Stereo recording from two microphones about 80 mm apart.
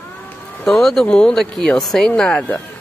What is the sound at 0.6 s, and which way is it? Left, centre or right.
Speech, centre.